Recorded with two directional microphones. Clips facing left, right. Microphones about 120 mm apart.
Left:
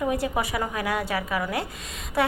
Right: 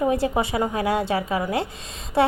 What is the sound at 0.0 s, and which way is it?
A woman's voice, 25° right (ahead or behind).